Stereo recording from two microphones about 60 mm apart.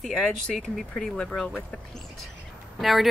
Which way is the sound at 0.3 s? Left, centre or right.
Centre.